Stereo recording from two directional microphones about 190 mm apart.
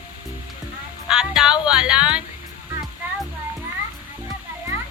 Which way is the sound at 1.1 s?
5° right (ahead or behind).